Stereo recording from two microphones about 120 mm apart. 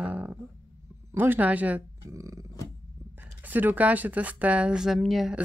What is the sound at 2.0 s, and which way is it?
Burping, 25° right (ahead or behind).